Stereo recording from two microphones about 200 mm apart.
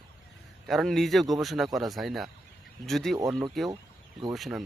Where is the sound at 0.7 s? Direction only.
Centre (ahead or behind).